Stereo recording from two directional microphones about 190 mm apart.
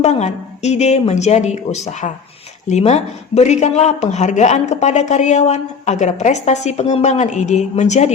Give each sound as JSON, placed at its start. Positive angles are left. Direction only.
{"t": 0.0, "sound": "speech", "side_deg": 35}